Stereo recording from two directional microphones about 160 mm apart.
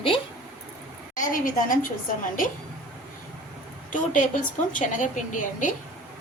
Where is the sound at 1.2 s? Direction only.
55° left (ahead or behind).